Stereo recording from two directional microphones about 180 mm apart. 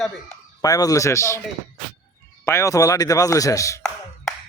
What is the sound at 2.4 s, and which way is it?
Speech, 15° left (ahead or behind).